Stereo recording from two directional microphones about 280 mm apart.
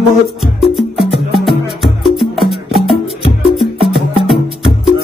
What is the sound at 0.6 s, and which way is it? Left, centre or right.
Music, centre.